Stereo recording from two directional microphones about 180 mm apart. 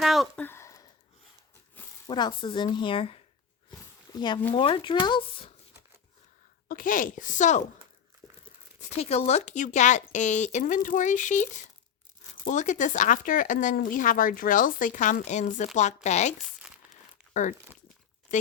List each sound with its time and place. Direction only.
0.0 s a sound: centre (ahead or behind)
0.4 s a sound: 15° left (ahead or behind)
2.0 s speech: 25° left (ahead or behind)
3.7 s a sound: 25° left (ahead or behind)
4.5 s speech: 30° left (ahead or behind)
6.7 s speech: 50° left (ahead or behind)
8.8 s speech: 35° left (ahead or behind)
12.5 s speech: 45° left (ahead or behind)
18.3 s speech: 45° left (ahead or behind)